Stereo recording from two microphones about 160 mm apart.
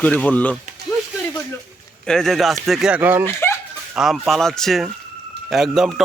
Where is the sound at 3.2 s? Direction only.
15° left (ahead or behind).